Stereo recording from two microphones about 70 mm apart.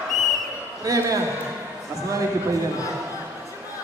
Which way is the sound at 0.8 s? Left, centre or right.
Right.